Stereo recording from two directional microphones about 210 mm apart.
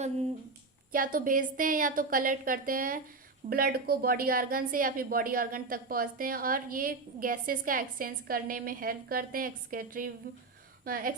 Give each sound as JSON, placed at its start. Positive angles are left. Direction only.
{"t": 0.9, "sound": "a woman's voice", "side_deg": -40}